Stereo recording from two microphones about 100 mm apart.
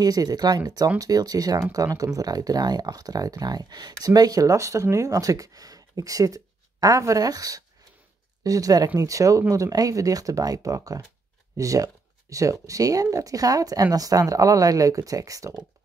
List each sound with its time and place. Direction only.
0.0 s speech: 40° right (ahead or behind)